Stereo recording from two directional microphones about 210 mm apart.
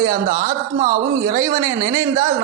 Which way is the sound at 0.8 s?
15° right (ahead or behind).